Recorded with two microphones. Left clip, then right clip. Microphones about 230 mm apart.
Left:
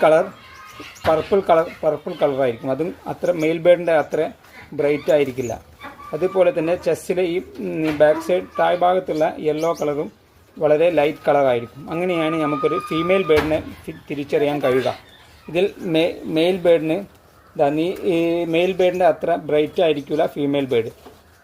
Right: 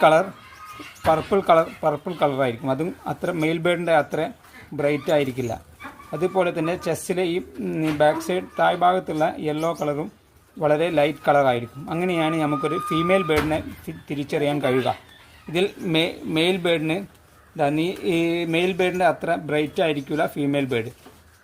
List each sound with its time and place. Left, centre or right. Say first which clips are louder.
0.0 s a man's voice: left 2 dB; right